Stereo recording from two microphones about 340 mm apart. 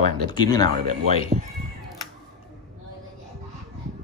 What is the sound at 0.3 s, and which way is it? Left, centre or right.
Speech, centre.